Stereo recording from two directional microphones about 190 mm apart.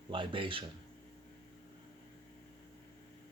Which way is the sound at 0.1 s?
25° right (ahead or behind).